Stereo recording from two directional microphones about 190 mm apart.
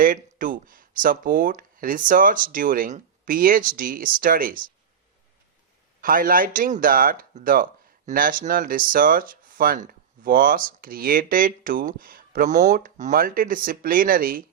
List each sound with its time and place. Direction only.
0.0 s speech: 45° right (ahead or behind)
6.0 s speech: 45° right (ahead or behind)